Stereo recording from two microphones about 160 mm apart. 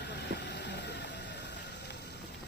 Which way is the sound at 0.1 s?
90° left.